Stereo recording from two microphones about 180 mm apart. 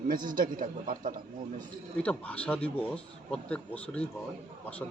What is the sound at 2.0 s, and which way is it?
Speech, 5° left (ahead or behind).